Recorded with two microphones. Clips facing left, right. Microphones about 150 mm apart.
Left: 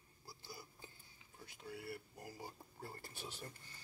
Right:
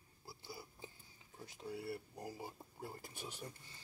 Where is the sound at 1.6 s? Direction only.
25° right (ahead or behind).